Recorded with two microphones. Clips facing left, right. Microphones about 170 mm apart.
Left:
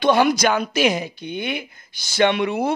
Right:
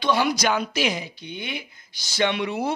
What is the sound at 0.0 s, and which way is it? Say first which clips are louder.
A woman's voice: left 5 dB; 55° left (ahead or behind).